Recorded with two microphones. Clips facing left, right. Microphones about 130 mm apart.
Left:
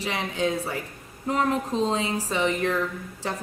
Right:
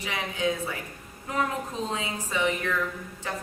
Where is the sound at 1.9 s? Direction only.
30° left (ahead or behind).